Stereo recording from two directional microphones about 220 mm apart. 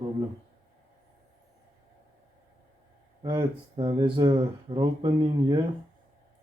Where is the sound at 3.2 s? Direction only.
20° right (ahead or behind).